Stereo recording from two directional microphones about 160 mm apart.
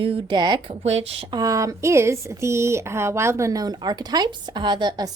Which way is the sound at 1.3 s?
20° right (ahead or behind).